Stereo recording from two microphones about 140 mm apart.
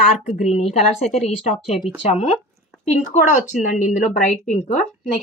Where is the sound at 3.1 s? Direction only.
60° left (ahead or behind).